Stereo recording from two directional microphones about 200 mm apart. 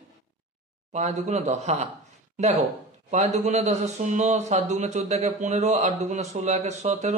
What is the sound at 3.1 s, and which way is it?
A man's voice, 35° right (ahead or behind).